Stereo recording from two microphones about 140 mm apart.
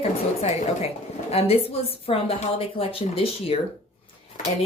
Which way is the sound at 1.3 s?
45° left (ahead or behind).